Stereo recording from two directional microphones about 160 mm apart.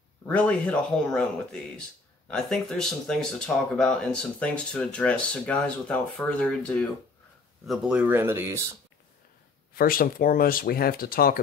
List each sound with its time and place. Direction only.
0.3 s speech: 10° left (ahead or behind); by 8.6 s 15° right (ahead or behind)
9.8 s speech: 65° left (ahead or behind)